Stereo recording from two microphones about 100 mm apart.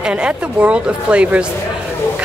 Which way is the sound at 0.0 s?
10° right (ahead or behind).